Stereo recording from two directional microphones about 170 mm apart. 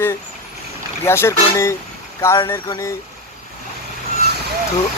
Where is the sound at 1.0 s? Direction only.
15° left (ahead or behind).